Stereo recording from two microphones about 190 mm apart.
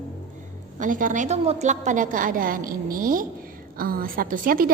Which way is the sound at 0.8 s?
45° right (ahead or behind).